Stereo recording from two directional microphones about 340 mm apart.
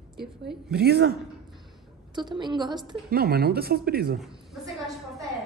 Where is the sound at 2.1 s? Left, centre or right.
Centre.